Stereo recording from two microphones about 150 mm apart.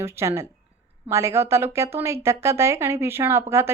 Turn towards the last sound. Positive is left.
turn(degrees=-15)  # may be behind; listen again after turning